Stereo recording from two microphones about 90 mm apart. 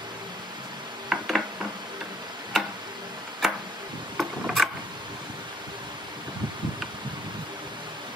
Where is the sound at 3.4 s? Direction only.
5° right (ahead or behind).